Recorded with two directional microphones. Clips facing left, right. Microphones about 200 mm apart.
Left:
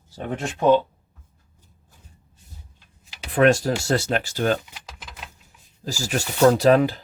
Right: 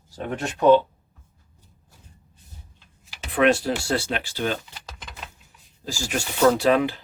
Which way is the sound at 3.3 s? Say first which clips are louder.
Left 2 dB; 40° left (ahead or behind).